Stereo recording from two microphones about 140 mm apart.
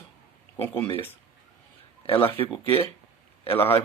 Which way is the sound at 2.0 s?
40° left (ahead or behind).